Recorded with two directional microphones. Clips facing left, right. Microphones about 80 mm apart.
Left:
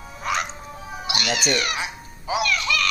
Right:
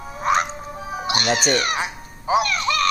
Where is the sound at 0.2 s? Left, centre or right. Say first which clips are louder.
Right 6 dB; right.